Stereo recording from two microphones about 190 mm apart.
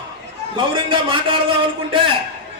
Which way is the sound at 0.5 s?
25° right (ahead or behind).